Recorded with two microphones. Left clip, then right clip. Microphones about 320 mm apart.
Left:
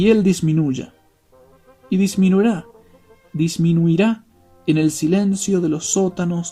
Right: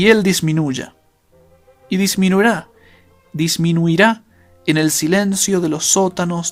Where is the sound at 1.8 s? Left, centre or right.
Centre.